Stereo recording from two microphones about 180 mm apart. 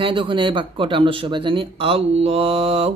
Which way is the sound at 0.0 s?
30° right (ahead or behind).